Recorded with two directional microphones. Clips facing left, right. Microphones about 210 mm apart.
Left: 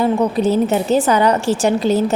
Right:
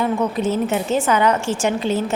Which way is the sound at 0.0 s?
35° left (ahead or behind).